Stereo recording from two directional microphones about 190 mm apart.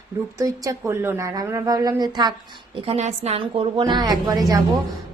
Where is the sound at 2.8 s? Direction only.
35° right (ahead or behind).